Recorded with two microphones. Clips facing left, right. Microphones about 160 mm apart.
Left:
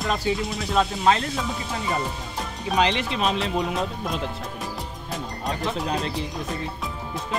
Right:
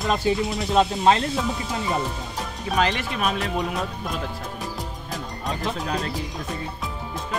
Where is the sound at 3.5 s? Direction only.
Centre (ahead or behind).